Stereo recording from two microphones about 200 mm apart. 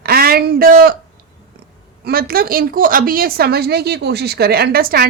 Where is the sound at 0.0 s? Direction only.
50° right (ahead or behind).